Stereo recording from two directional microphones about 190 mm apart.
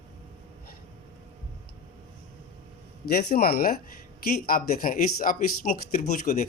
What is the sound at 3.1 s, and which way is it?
Speech, 55° left (ahead or behind).